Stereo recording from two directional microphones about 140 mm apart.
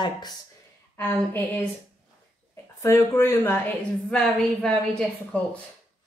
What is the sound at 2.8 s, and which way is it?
Speech, 15° left (ahead or behind).